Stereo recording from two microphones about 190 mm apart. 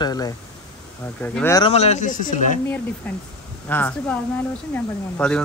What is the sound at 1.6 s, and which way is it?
Speech, 30° left (ahead or behind).